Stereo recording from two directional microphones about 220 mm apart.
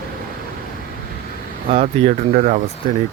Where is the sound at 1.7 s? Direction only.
35° right (ahead or behind).